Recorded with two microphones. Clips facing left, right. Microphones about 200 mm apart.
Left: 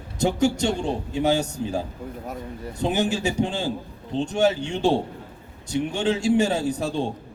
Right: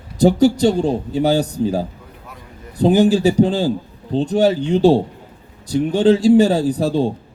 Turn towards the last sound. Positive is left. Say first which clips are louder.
# right 7 dB
turn(degrees=-35)  # may be behind; listen again after turning